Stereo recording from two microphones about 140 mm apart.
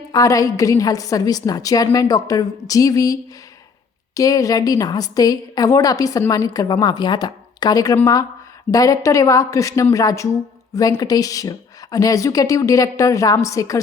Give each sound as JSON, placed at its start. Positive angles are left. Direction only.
{"t": 0.1, "sound": "a woman's voice", "side_deg": 25}